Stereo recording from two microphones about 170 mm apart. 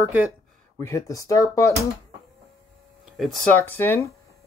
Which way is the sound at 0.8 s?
20° left (ahead or behind).